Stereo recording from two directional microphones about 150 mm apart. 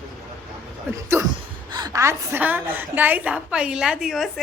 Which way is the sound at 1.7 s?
30° right (ahead or behind).